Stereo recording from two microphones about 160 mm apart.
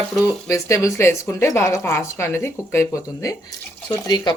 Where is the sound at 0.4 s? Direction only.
20° left (ahead or behind).